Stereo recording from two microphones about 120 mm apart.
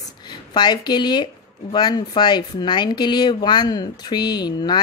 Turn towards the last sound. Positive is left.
turn(degrees=35)  # may be behind; listen again after turning